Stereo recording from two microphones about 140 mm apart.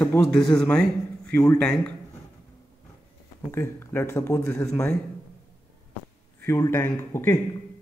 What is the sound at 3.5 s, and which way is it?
Speech, 15° left (ahead or behind).